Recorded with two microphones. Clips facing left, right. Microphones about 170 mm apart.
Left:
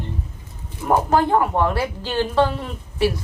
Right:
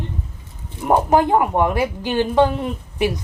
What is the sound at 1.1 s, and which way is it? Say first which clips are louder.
A woman's voice: right 2 dB; 15° right (ahead or behind).